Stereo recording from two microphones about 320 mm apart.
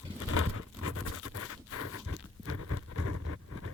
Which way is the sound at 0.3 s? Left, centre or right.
Left.